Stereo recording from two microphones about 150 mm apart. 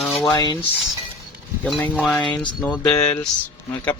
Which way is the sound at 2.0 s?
Centre (ahead or behind).